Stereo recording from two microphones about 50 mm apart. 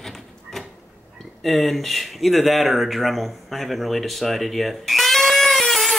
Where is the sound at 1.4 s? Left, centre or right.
Centre.